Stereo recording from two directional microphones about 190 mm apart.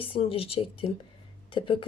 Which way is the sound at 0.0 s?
30° left (ahead or behind).